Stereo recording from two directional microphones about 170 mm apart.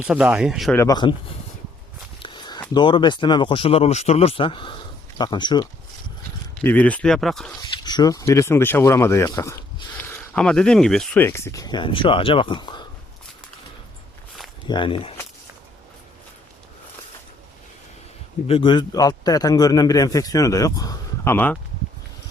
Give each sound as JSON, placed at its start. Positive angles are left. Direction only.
{"t": 0.1, "sound": "speech", "side_deg": -5}
{"t": 0.8, "sound": "a man's voice", "side_deg": 25}
{"t": 2.2, "sound": "a man's voice", "side_deg": 25}
{"t": 6.5, "sound": "speech", "side_deg": 10}
{"t": 7.6, "sound": "a sound", "side_deg": 25}
{"t": 8.3, "sound": "speech", "side_deg": 15}
{"t": 10.3, "sound": "a man's voice", "side_deg": 5}
{"t": 14.7, "sound": "speech", "side_deg": 30}
{"t": 18.4, "sound": "a man's voice", "side_deg": 30}